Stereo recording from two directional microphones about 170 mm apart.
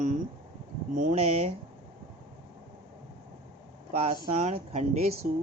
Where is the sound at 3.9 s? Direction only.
40° right (ahead or behind).